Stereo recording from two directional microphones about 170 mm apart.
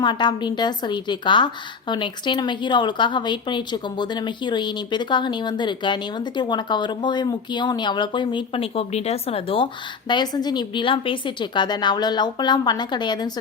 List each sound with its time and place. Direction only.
0.0 s a woman's voice: 25° left (ahead or behind)